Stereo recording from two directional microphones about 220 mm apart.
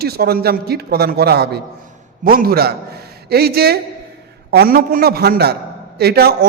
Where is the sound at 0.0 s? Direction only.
45° right (ahead or behind).